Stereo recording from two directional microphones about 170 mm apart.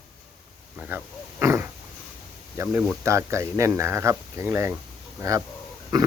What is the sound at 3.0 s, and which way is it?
Speech, 15° right (ahead or behind).